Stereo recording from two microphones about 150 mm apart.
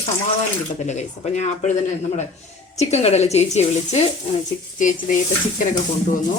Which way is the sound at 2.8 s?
45° left (ahead or behind).